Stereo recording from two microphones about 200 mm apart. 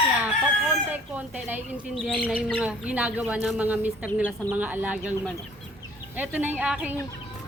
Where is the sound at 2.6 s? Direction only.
5° right (ahead or behind).